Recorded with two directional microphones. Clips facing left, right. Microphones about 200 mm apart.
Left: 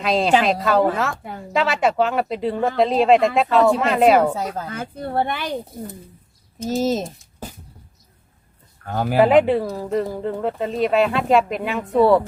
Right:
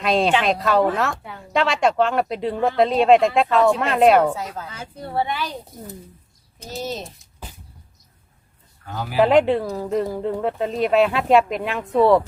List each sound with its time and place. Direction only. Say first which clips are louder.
0.0 s speech: left 1 dB; centre (ahead or behind)
4.4 s speech: left 5 dB; 45° left (ahead or behind)
6.7 s speech: left 9 dB; 45° left (ahead or behind)
8.9 s speech: left 7 dB; 55° left (ahead or behind)
9.1 s speech: left 1 dB; centre (ahead or behind)